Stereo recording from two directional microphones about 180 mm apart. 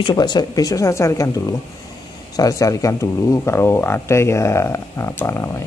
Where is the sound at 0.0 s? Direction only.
25° left (ahead or behind).